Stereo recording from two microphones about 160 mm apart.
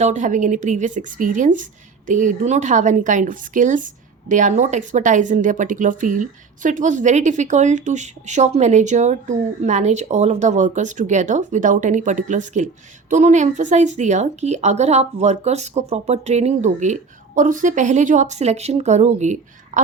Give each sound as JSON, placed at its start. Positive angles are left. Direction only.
{"t": 0.0, "sound": "speech", "side_deg": -50}